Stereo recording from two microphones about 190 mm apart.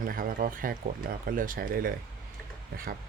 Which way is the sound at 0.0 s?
50° right (ahead or behind).